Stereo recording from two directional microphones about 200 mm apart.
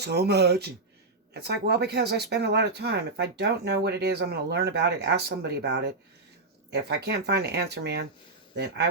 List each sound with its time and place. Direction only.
0.0 s speech: 55° right (ahead or behind)